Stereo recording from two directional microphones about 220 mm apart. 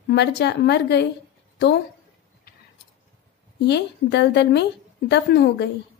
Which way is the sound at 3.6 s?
50° left (ahead or behind).